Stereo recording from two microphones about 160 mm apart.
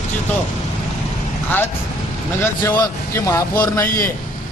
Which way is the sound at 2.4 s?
15° left (ahead or behind).